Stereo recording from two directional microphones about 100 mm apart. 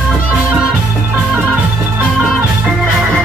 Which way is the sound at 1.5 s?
20° right (ahead or behind).